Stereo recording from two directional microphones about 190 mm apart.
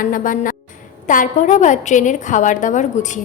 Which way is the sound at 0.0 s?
45° left (ahead or behind).